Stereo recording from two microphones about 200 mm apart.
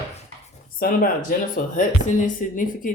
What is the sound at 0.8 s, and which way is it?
Speech, 45° left (ahead or behind).